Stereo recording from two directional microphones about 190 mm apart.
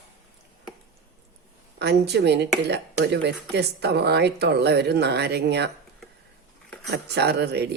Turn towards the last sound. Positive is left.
turn(degrees=-60)  # may be behind; listen again after turning